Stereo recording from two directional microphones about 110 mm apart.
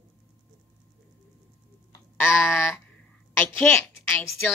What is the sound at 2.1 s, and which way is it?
A woman's voice, 20° left (ahead or behind).